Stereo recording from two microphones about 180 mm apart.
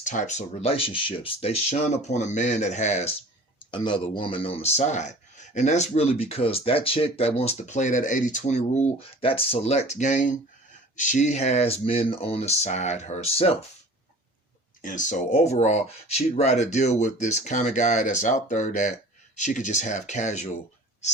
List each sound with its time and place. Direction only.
0.0 s speech: 45° left (ahead or behind)
3.6 s speech: 25° left (ahead or behind)
14.8 s speech: 45° left (ahead or behind)